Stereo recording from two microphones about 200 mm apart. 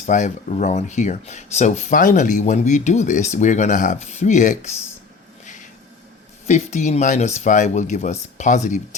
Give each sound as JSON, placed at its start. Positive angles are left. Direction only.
{"t": 0.0, "sound": "speech", "side_deg": 35}
{"t": 6.5, "sound": "speech", "side_deg": 35}